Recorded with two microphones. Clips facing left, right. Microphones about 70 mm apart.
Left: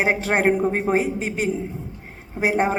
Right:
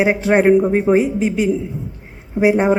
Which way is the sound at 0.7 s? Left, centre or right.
Left.